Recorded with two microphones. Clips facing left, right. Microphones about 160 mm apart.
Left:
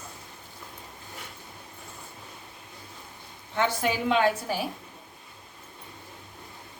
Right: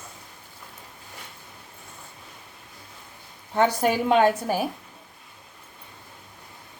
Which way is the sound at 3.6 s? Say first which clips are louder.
Right 5 dB; 45° right (ahead or behind).